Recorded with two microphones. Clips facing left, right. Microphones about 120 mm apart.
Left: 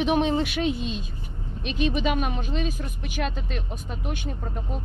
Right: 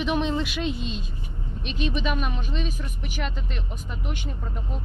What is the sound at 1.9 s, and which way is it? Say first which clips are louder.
Speech: left 2 dB; 45° left (ahead or behind).